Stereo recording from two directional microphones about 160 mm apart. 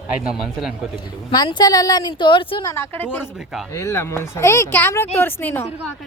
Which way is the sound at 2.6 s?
15° left (ahead or behind).